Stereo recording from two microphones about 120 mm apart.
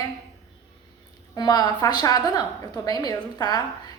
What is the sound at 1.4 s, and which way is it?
A woman's voice, 35° left (ahead or behind).